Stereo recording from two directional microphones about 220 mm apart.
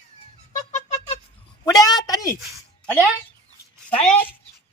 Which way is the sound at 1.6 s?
15° left (ahead or behind).